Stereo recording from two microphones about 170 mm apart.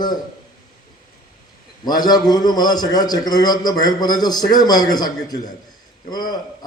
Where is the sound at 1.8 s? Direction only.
25° left (ahead or behind).